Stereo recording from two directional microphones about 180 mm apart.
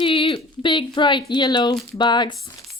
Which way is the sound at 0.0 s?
30° left (ahead or behind).